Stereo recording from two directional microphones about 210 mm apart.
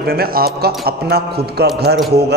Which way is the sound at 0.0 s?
45° right (ahead or behind).